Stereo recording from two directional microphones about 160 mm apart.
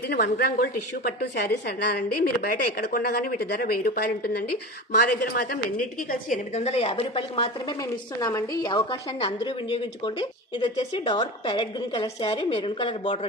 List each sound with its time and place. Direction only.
0.1 s a woman's voice: 85° left; by 7.8 s 35° left (ahead or behind)
7.8 s a woman's voice: 20° left (ahead or behind)